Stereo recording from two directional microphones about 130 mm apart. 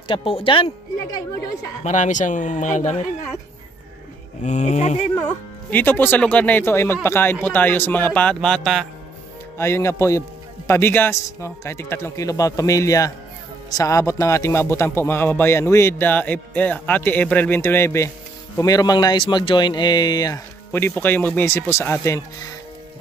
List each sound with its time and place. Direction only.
0.1 s speech: 45° left (ahead or behind)
1.9 s speech: 70° left (ahead or behind)
4.4 s speech: 65° left (ahead or behind)
5.7 s speech: 15° left (ahead or behind)
9.6 s a man's voice: 20° left (ahead or behind)
20.7 s a man's voice: 15° left (ahead or behind)